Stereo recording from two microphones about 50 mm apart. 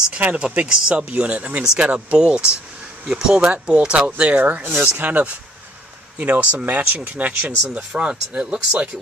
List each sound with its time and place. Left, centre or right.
0.2 s speech: right
0.7 s speech: centre
3.4 s speech: right